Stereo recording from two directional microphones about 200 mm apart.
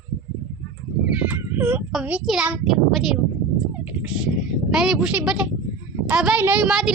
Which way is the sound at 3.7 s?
5° right (ahead or behind).